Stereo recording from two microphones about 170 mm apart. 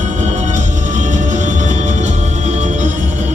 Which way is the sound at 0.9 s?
45° right (ahead or behind).